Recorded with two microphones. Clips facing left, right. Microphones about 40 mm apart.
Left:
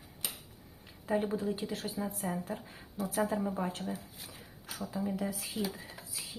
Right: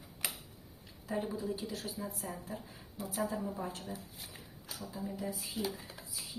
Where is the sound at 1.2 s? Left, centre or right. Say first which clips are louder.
Left 4 dB; left.